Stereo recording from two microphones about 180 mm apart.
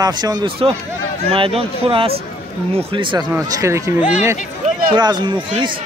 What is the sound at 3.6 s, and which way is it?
Speech, 15° right (ahead or behind).